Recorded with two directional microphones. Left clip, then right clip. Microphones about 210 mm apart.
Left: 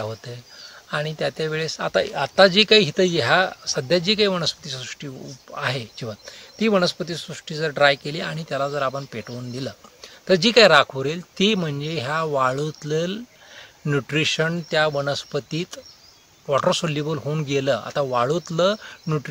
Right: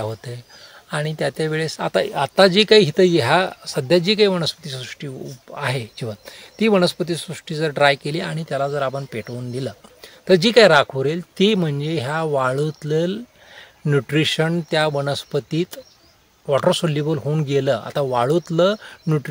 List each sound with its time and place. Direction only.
0.0 s speech: 40° right (ahead or behind)